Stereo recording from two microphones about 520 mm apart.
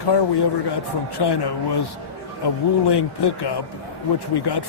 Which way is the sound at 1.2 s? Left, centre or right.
Left.